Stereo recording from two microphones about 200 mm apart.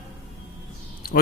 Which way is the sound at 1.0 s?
50° left (ahead or behind).